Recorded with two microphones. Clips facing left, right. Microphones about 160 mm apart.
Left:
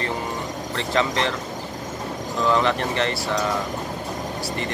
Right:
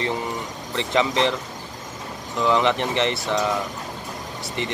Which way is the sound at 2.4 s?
20° right (ahead or behind).